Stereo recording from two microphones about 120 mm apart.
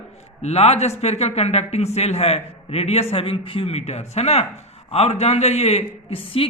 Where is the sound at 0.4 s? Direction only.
65° left (ahead or behind).